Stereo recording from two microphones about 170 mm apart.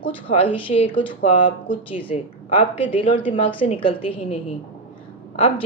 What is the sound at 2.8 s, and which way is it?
Speech, 30° left (ahead or behind).